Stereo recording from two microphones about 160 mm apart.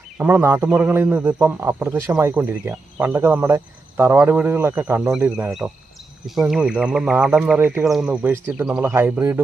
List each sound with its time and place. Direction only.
0.2 s a man's voice: 10° right (ahead or behind)